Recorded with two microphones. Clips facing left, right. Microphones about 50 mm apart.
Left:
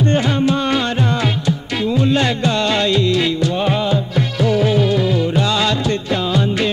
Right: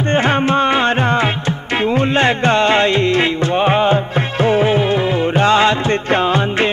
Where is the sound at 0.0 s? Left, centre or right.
Right.